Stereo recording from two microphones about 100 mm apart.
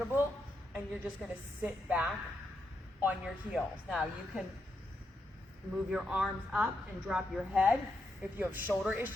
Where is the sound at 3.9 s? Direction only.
5° right (ahead or behind).